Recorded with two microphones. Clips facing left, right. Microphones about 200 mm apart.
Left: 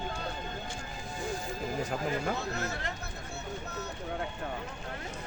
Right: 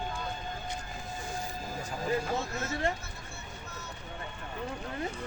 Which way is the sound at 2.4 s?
65° left (ahead or behind).